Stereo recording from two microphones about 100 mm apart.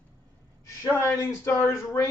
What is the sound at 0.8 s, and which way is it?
Speech, 25° left (ahead or behind).